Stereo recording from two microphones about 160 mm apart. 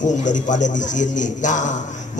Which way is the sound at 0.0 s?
50° left (ahead or behind).